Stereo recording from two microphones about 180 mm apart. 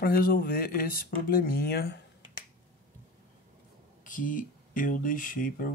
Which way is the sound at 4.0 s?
50° left (ahead or behind).